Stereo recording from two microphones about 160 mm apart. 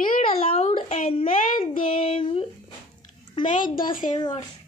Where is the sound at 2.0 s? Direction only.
35° left (ahead or behind).